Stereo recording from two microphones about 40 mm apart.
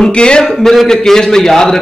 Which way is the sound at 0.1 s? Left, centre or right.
Left.